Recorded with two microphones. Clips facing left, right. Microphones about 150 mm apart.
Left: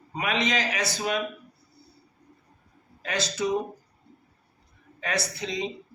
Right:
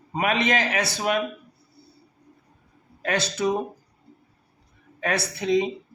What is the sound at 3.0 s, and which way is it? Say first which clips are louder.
Speech: right 4 dB; 60° right (ahead or behind).